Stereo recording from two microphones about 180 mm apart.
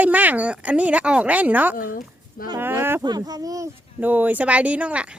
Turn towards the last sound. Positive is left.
turn(degrees=-5)  # may be behind; listen again after turning